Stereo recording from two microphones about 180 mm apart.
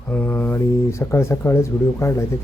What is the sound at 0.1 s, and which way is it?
Speech, 10° left (ahead or behind).